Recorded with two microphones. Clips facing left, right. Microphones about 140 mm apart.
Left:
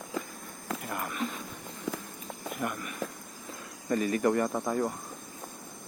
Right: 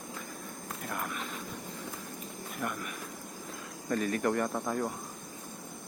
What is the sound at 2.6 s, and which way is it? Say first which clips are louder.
Speech: left 2 dB; 5° left (ahead or behind).